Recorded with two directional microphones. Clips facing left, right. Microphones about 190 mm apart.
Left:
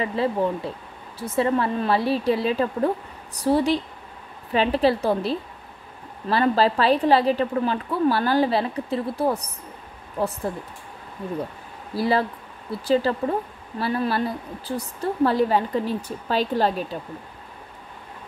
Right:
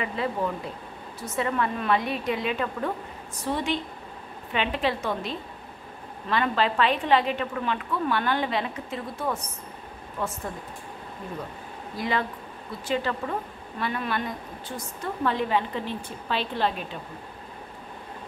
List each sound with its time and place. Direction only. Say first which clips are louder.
0.0 s a woman's voice: left 5 dB; 30° left (ahead or behind)
11.9 s a woman's voice: left 6 dB; 35° left (ahead or behind)